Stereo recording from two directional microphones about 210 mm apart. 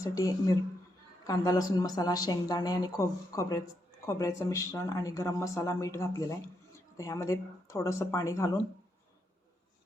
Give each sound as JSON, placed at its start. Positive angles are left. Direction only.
{"t": 0.0, "sound": "speech", "side_deg": 15}